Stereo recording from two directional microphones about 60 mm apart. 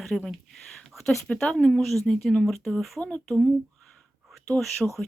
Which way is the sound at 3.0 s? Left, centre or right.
Centre.